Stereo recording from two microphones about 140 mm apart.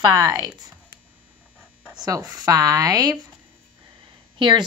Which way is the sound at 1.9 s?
25° right (ahead or behind).